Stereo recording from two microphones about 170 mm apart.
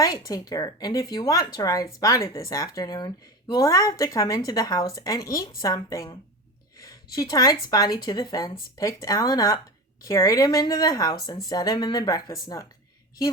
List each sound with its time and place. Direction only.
0.0 s speech: 20° left (ahead or behind)